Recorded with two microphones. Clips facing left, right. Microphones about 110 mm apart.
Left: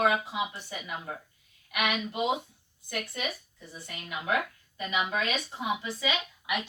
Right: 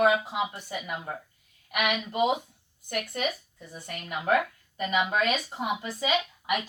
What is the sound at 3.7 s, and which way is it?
Speech, 50° right (ahead or behind).